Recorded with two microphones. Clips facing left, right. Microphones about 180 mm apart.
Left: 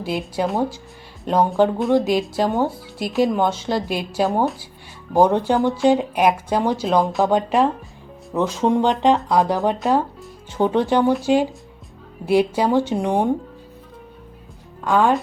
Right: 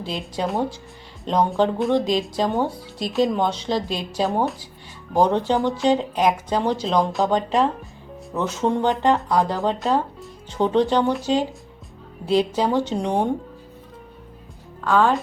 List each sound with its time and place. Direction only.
0.0 s speech: 5° left (ahead or behind)
14.8 s speech: 15° left (ahead or behind)